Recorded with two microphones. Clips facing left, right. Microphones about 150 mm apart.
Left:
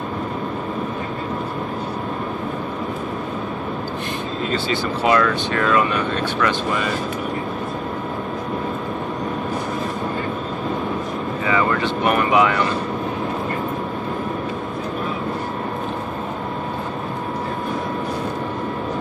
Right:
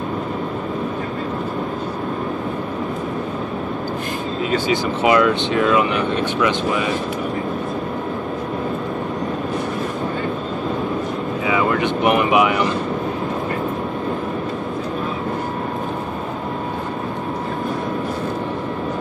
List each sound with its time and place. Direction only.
4.5 s speech: 15° right (ahead or behind)
11.4 s vehicle: 10° right (ahead or behind)